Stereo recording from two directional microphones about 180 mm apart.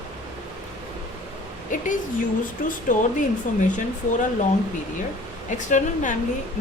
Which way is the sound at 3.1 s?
45° left (ahead or behind).